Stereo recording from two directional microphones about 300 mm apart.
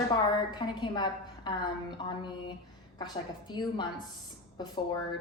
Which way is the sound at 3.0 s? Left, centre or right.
Centre.